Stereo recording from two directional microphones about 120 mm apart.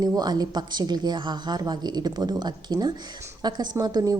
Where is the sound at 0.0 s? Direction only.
35° right (ahead or behind).